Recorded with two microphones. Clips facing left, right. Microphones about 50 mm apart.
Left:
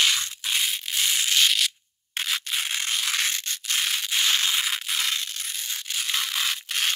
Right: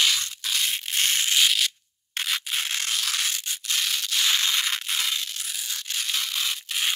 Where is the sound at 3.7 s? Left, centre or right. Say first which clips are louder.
Left 1 dB; centre.